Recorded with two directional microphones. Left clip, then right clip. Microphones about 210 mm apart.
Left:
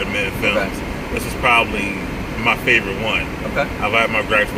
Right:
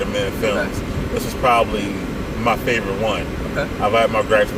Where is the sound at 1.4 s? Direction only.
20° right (ahead or behind).